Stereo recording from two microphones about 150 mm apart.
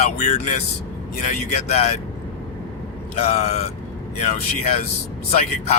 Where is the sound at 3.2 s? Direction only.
45° left (ahead or behind).